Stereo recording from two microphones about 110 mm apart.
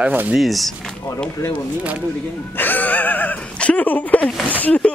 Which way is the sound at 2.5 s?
15° left (ahead or behind).